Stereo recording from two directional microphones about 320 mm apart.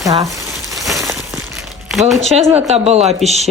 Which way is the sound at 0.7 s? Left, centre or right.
Centre.